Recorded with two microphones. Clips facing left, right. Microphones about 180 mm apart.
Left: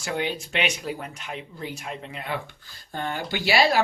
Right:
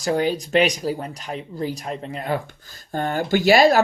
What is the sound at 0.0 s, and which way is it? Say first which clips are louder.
Speech: right 7 dB; 40° right (ahead or behind).